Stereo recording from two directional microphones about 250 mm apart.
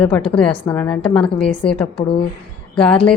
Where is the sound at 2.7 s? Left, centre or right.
Centre.